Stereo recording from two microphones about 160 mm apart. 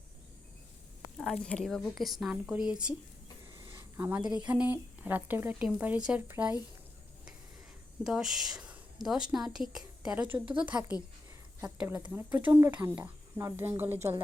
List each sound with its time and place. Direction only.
1.2 s a woman's voice: 5° left (ahead or behind)
3.5 s a sound: 20° right (ahead or behind)
4.3 s speech: 5° right (ahead or behind)
8.0 s a woman's voice: centre (ahead or behind)